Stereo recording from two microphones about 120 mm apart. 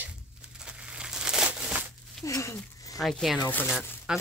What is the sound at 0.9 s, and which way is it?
Crumpling, 5° right (ahead or behind).